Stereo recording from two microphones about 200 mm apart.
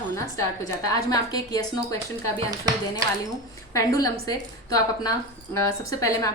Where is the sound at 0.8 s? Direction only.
20° left (ahead or behind).